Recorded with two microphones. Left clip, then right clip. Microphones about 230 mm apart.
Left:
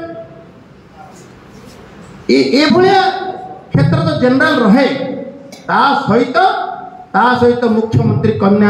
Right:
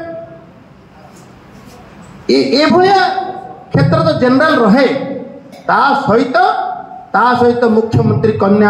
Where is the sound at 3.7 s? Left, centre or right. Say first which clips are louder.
Right 4 dB; right.